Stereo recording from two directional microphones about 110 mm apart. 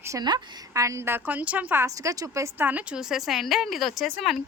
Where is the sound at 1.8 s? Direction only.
30° right (ahead or behind).